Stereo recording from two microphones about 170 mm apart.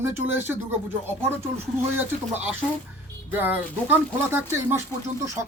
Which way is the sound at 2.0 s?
10° right (ahead or behind).